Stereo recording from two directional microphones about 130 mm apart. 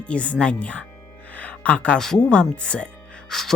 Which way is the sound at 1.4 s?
10° left (ahead or behind).